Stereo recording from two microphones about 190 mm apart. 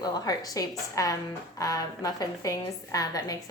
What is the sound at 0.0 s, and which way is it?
A woman's voice, 20° left (ahead or behind).